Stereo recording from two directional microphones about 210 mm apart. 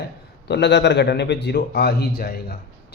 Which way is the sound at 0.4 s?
55° left (ahead or behind).